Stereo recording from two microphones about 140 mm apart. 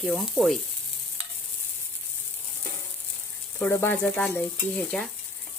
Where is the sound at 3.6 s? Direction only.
15° left (ahead or behind).